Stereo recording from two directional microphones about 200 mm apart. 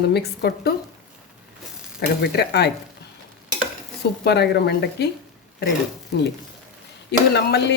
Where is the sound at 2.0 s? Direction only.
55° left (ahead or behind).